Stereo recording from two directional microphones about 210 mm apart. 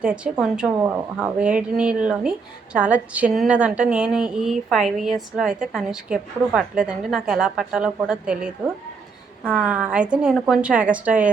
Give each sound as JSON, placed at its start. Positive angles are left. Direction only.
{"t": 0.0, "sound": "a woman's voice", "side_deg": -5}